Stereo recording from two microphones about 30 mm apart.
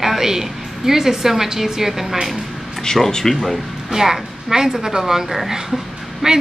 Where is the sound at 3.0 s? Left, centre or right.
Centre.